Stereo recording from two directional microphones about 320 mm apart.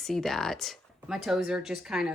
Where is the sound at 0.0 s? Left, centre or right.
Centre.